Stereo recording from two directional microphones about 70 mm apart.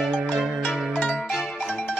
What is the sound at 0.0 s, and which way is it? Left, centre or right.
Music, centre.